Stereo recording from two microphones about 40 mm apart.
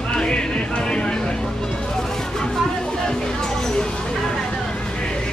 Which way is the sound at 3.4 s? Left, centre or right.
Centre.